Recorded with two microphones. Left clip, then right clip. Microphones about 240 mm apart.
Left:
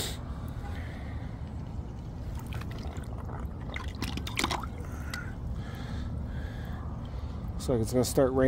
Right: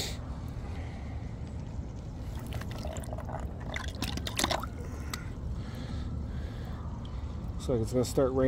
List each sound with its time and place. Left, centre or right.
3.7 s liquid: right
7.6 s speech: centre